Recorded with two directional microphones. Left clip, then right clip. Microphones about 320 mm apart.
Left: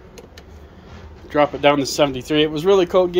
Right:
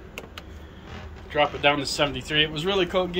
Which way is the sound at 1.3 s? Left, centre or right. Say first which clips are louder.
Left 6 dB; left.